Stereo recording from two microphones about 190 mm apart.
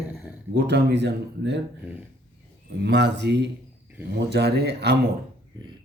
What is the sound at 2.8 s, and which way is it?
Speech, 65° right (ahead or behind).